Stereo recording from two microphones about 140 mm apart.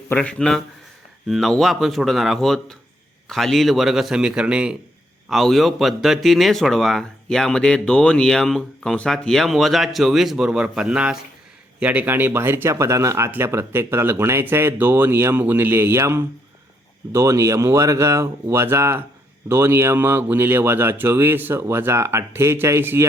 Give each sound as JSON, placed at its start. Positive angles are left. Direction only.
{"t": 0.1, "sound": "speech", "side_deg": 10}